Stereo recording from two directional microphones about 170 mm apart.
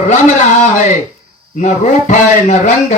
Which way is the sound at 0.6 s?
50° left (ahead or behind).